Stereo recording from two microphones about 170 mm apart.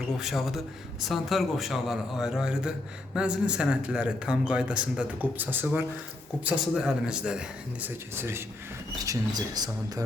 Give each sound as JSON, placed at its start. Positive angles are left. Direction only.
{"t": 0.2, "sound": "a man's voice", "side_deg": 0}